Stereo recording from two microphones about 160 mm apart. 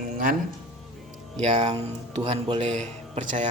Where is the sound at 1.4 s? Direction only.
35° right (ahead or behind).